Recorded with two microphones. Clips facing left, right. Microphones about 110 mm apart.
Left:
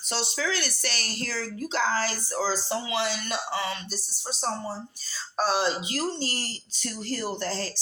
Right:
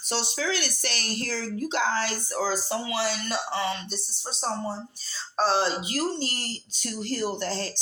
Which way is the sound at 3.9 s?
Centre (ahead or behind).